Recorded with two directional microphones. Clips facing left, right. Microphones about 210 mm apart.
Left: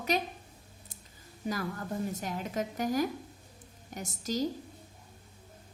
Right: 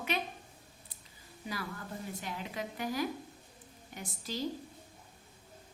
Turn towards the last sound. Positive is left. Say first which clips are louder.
# left 6 dB
turn(degrees=45)  # may be behind; listen again after turning